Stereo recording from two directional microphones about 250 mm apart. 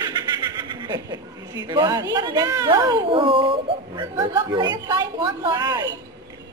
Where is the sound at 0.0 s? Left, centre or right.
Centre.